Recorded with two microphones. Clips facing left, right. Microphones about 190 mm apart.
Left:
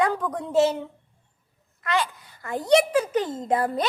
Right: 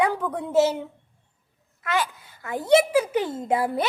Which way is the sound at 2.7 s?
10° right (ahead or behind).